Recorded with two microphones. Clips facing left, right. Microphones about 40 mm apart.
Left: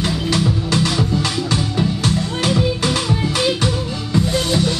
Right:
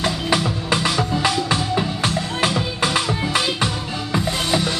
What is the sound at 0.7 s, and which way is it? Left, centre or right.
Music, centre.